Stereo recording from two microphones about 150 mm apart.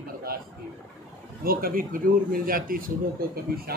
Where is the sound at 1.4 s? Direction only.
75° right (ahead or behind).